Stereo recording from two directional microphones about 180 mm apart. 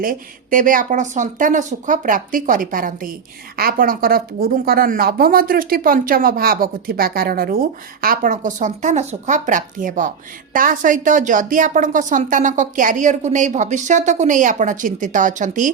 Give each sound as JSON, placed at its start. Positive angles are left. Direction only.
{"t": 0.0, "sound": "a woman's voice", "side_deg": -50}